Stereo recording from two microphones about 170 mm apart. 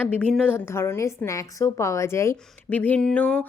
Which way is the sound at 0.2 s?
5° left (ahead or behind).